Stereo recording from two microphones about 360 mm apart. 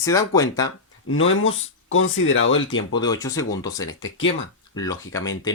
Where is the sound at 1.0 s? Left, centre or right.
Left.